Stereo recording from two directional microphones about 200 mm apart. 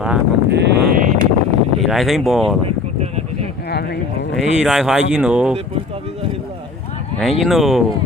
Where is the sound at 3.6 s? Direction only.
55° left (ahead or behind).